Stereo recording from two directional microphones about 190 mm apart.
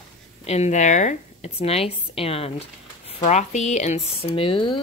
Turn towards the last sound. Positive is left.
turn(degrees=25)  # may be behind; listen again after turning